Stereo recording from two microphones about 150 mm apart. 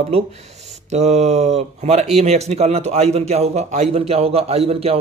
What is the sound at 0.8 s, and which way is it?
Speech, 50° right (ahead or behind).